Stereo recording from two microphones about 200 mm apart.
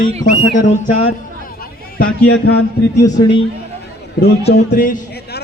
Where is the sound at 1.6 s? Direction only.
50° left (ahead or behind).